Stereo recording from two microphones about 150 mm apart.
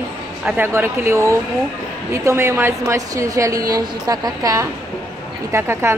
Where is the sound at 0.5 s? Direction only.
15° right (ahead or behind).